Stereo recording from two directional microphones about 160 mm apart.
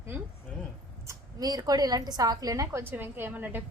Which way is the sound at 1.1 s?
20° right (ahead or behind).